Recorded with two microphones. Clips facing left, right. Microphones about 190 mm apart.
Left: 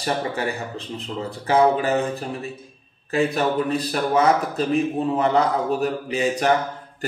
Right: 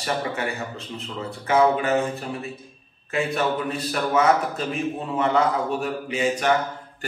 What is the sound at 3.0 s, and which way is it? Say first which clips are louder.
A man's voice: left 3 dB; 35° left (ahead or behind).